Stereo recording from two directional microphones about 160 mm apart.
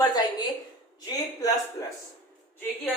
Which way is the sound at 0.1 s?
25° left (ahead or behind).